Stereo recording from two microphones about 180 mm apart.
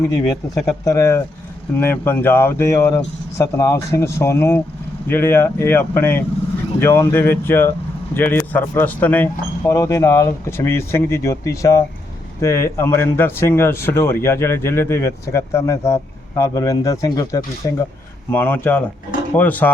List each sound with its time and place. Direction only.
0.6 s speech: 15° left (ahead or behind)